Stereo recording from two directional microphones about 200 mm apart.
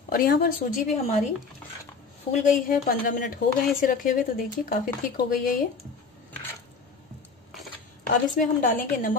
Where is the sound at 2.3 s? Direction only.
40° left (ahead or behind).